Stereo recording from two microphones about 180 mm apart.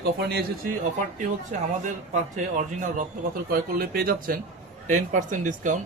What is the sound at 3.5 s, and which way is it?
Speech, 55° right (ahead or behind).